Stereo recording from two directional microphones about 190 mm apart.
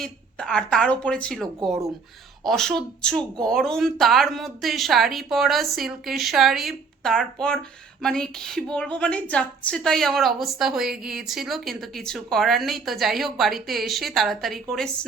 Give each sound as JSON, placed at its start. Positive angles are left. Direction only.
{"t": 0.0, "sound": "a woman's voice", "side_deg": 5}